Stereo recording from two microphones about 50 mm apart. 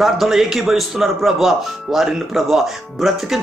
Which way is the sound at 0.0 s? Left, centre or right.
Centre.